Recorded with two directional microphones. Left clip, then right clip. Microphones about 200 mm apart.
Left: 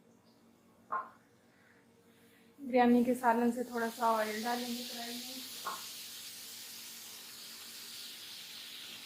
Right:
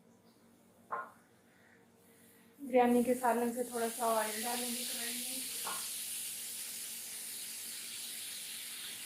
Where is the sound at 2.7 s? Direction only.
45° left (ahead or behind).